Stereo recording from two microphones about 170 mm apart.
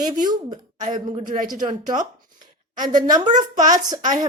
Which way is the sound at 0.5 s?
45° right (ahead or behind).